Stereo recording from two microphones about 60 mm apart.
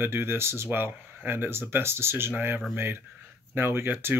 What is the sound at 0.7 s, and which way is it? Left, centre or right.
Speech, right.